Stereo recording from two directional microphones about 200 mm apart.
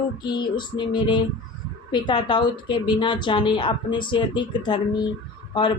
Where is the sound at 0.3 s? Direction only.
20° left (ahead or behind).